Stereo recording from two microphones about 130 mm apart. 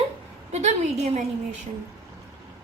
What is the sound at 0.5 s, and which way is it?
Speech, 55° right (ahead or behind).